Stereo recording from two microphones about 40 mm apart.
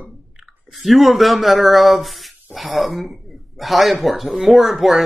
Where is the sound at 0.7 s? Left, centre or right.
Centre.